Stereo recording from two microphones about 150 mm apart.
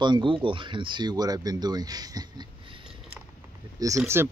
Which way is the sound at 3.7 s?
20° right (ahead or behind).